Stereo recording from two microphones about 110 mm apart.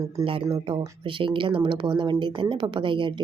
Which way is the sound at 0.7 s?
50° right (ahead or behind).